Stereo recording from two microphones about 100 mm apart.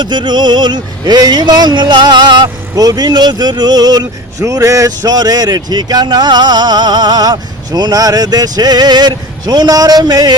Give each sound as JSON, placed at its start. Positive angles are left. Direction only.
{"t": 0.0, "sound": "speech", "side_deg": -50}